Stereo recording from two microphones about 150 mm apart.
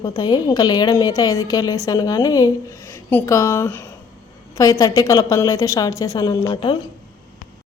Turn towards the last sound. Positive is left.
turn(degrees=25)  # may be behind; listen again after turning